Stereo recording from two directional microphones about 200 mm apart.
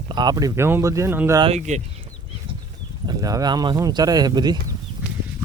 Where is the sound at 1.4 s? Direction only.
30° right (ahead or behind).